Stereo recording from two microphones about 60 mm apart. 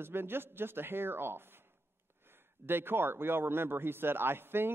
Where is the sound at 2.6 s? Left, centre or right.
Right.